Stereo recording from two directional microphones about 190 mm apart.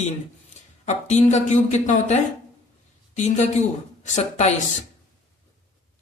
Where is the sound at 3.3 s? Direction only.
40° left (ahead or behind).